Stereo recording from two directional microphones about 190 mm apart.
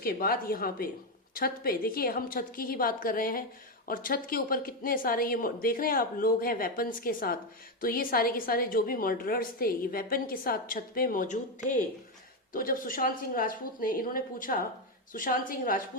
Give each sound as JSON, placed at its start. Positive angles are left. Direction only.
{"t": 0.0, "sound": "a woman's voice", "side_deg": 50}